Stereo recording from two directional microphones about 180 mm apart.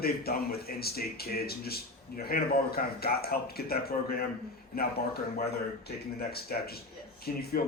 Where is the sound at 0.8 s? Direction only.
60° left (ahead or behind).